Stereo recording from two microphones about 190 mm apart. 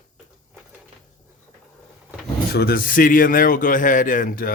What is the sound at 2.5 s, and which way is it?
A man's voice, 55° left (ahead or behind).